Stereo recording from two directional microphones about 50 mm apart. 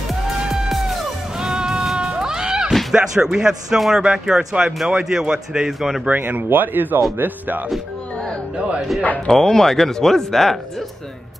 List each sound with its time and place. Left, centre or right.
0.5 s music: centre
2.0 s a sound: centre
2.9 s speech: centre
6.0 s speech: right
8.5 s speech: right
9.3 s speech: centre